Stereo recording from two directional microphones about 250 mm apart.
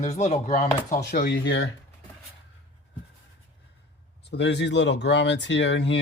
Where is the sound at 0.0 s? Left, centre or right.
Left.